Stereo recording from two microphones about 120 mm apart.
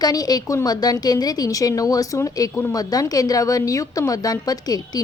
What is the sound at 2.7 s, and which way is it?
A woman's voice, 30° left (ahead or behind).